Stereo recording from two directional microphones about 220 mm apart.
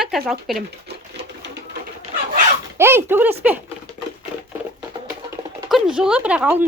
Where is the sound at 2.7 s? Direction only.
10° right (ahead or behind).